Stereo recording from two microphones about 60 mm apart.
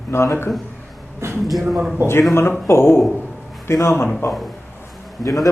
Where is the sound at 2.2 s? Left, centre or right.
Left.